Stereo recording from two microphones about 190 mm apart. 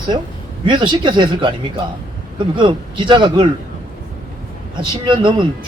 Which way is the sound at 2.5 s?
25° right (ahead or behind).